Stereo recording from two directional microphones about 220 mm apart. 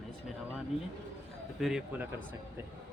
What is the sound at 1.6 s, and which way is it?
Speech, centre (ahead or behind).